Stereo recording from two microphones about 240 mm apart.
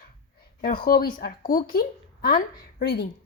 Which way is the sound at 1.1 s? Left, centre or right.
Left.